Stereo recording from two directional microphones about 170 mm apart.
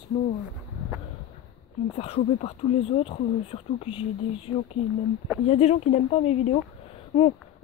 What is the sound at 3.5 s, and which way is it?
Speech, 35° left (ahead or behind).